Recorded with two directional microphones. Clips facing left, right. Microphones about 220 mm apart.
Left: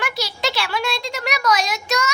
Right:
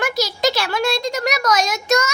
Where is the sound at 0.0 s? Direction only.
40° right (ahead or behind).